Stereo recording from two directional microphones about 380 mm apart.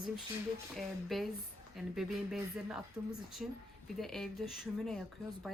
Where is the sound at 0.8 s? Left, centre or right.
Centre.